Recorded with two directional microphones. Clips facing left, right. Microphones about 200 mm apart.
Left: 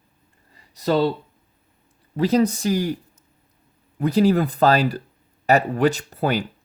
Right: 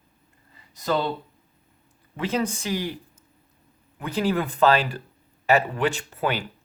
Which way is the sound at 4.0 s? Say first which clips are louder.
Left 7 dB; 40° left (ahead or behind).